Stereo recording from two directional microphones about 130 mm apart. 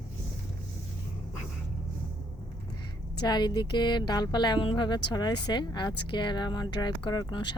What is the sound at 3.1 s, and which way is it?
Speech, 35° left (ahead or behind).